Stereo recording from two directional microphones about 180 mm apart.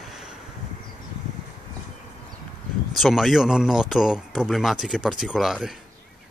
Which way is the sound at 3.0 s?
Centre (ahead or behind).